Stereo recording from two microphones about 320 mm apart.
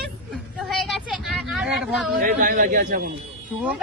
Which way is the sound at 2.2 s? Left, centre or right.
Right.